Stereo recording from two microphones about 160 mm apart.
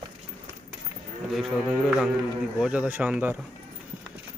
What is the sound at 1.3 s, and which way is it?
Speech, centre (ahead or behind).